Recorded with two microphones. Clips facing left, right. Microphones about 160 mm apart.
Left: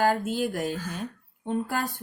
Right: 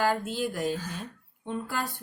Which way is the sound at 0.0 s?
50° left (ahead or behind).